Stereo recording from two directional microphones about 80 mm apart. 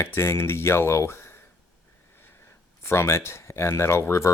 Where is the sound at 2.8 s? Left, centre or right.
Left.